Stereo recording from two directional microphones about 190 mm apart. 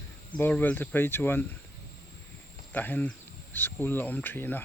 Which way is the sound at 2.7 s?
10° left (ahead or behind).